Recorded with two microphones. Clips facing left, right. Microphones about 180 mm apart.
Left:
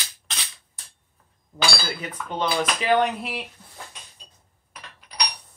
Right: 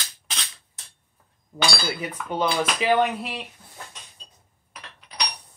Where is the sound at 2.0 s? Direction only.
10° right (ahead or behind).